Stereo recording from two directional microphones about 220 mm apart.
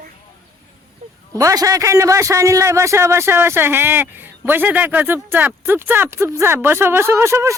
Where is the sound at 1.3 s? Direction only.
15° right (ahead or behind).